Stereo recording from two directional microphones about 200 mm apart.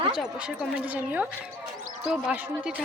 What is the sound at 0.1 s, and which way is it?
Speech, 5° right (ahead or behind).